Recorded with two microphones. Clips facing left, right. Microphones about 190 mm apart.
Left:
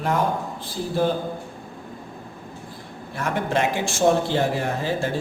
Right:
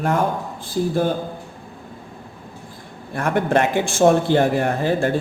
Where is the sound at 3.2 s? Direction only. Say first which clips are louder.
Right 5 dB; 55° right (ahead or behind).